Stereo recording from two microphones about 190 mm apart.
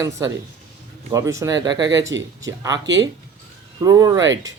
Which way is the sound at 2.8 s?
70° right (ahead or behind).